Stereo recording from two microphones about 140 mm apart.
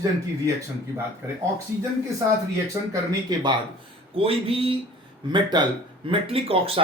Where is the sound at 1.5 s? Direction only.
20° right (ahead or behind).